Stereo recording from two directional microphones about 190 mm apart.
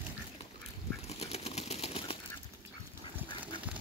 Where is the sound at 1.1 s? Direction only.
35° left (ahead or behind).